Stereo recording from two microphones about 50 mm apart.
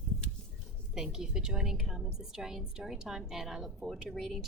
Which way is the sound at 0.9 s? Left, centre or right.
Centre.